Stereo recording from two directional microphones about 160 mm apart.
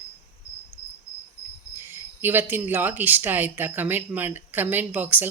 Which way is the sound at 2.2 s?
15° right (ahead or behind).